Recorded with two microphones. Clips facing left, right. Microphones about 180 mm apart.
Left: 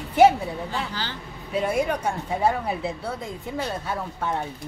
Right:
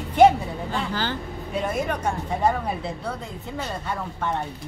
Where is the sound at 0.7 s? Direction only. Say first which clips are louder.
Right 4 dB; 50° right (ahead or behind).